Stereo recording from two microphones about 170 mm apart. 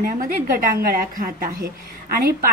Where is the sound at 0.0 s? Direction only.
55° right (ahead or behind).